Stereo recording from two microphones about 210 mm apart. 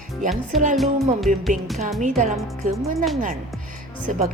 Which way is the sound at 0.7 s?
Centre (ahead or behind).